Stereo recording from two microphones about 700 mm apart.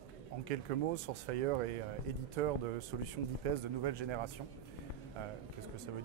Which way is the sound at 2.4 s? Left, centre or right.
Right.